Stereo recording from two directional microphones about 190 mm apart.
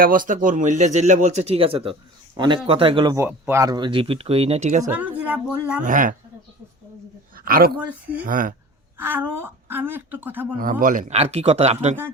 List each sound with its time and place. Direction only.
0.0 s speech: 45° right (ahead or behind); by 3.2 s 25° right (ahead or behind)
3.2 s speech: 10° right (ahead or behind); by 4.9 s 40° right (ahead or behind)
4.9 s speech: 10° right (ahead or behind)
5.8 s speech: 45° right (ahead or behind)
7.3 s dog: 50° right (ahead or behind)
7.8 s speech: 10° right (ahead or behind)
8.2 s speech: 45° right (ahead or behind)
9.0 s speech: 10° right (ahead or behind)
10.6 s speech: 45° right (ahead or behind)